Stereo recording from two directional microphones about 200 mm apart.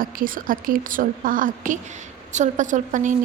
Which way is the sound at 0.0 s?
45° right (ahead or behind).